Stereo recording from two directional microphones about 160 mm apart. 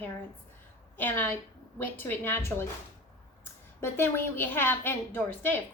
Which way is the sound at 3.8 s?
15° left (ahead or behind).